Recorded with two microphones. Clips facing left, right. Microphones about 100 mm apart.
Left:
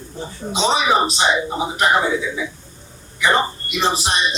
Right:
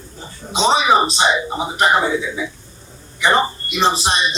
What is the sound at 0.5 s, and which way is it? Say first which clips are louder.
Speech: right 3 dB; 25° right (ahead or behind).